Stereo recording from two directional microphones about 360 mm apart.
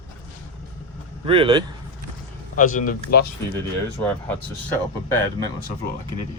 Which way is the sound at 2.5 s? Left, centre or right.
Left.